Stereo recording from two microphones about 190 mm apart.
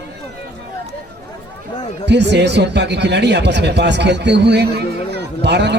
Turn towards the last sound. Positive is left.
turn(degrees=-65)  # may be behind; listen again after turning